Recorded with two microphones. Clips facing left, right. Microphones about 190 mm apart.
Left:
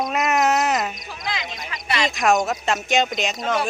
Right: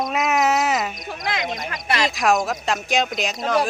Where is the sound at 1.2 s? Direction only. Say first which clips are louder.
Right 4 dB; 55° right (ahead or behind).